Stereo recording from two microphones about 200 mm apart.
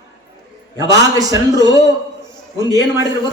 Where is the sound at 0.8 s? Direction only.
20° right (ahead or behind).